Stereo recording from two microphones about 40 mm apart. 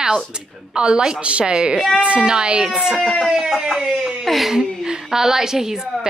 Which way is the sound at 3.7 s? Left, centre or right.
Centre.